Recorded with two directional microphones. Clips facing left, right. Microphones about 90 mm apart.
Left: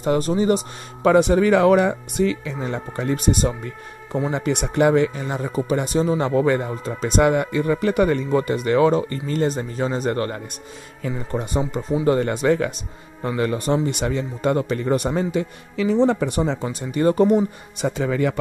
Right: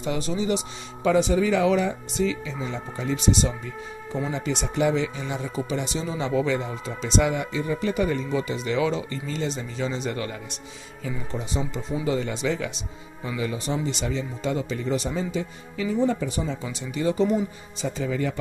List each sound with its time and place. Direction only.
0.0 s speech: 45° left (ahead or behind)
1.0 s speech: 55° left (ahead or behind)
16.6 s speech: 50° left (ahead or behind); by 18.4 s 70° left (ahead or behind)